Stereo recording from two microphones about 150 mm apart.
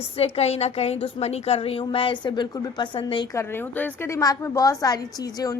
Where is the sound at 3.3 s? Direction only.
15° left (ahead or behind).